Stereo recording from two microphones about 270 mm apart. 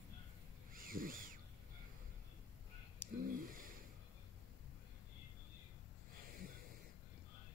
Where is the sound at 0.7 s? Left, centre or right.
Right.